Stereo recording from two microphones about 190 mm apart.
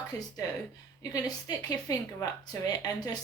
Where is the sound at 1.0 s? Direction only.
20° left (ahead or behind).